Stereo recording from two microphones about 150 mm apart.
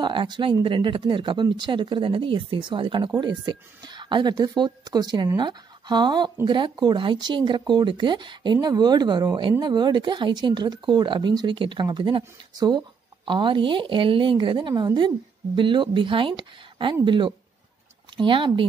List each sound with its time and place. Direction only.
0.0 s a woman's voice: 35° right (ahead or behind)